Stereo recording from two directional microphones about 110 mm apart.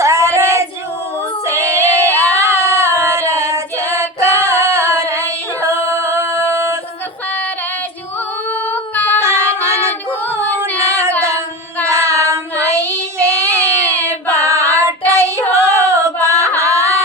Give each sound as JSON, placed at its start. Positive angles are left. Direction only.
{"t": 0.0, "sound": "female singing", "side_deg": -25}
{"t": 8.4, "sound": "child singing", "side_deg": 15}
{"t": 9.2, "sound": "female singing", "side_deg": -25}
{"t": 10.1, "sound": "female singing", "side_deg": 15}
{"t": 10.8, "sound": "female singing", "side_deg": -25}
{"t": 11.9, "sound": "child singing", "side_deg": -25}
{"t": 16.1, "sound": "a sound", "side_deg": -25}